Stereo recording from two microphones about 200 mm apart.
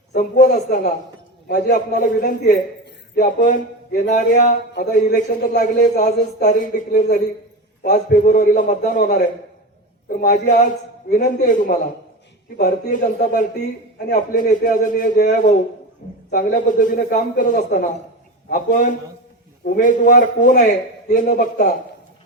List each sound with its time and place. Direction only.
0.1 s a man's voice: 40° left (ahead or behind)